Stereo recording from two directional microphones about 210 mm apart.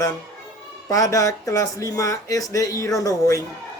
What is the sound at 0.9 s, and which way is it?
Speech, 15° left (ahead or behind).